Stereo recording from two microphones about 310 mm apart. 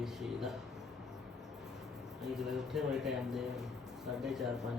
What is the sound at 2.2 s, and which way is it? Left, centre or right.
Speech, centre.